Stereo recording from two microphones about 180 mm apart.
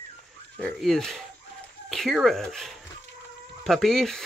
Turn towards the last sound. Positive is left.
turn(degrees=0)  # may be behind; listen again after turning